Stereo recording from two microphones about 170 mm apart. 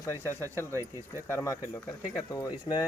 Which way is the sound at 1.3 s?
15° left (ahead or behind).